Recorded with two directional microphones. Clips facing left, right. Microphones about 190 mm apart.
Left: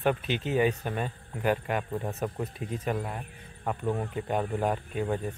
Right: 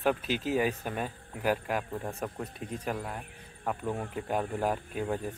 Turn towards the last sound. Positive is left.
turn(degrees=0)  # may be behind; listen again after turning